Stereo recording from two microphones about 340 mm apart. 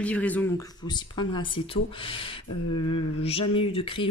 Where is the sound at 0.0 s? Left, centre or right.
Centre.